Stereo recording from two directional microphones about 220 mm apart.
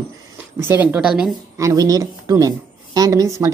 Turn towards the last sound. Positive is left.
turn(degrees=-15)  # may be behind; listen again after turning